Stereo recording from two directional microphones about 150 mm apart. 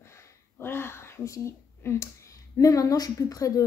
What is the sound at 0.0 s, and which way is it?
Speech, 20° left (ahead or behind).